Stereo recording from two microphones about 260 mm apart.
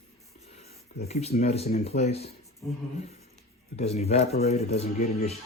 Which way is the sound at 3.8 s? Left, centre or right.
Left.